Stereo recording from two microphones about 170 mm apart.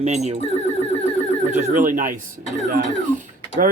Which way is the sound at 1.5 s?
50° right (ahead or behind).